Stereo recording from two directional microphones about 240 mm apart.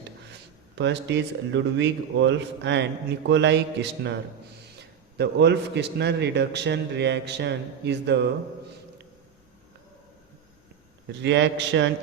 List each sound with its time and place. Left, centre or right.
0.8 s a man's voice: right
5.1 s a man's voice: right
11.2 s a man's voice: right